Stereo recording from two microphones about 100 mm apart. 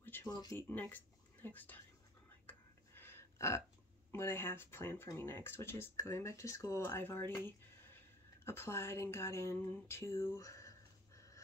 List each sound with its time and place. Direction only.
0.0 s a sound: 20° left (ahead or behind)
0.3 s speech: 40° left (ahead or behind)
0.6 s speech: 20° left (ahead or behind)
2.4 s whispering: 25° left (ahead or behind)
4.1 s speech: 25° left (ahead or behind)
8.5 s speech: 25° left (ahead or behind)
11.1 s crow: 30° left (ahead or behind)